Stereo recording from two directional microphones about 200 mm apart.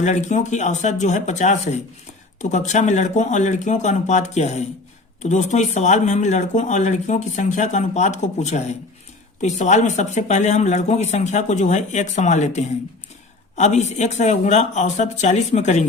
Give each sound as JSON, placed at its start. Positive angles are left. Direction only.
{"t": 0.0, "sound": "speech", "side_deg": 35}